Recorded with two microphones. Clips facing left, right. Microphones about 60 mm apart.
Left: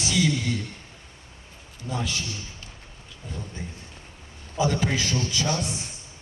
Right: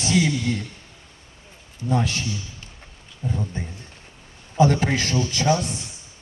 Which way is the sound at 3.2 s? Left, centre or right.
Right.